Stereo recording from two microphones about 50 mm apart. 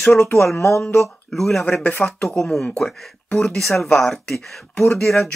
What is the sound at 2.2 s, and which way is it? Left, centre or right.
Speech, centre.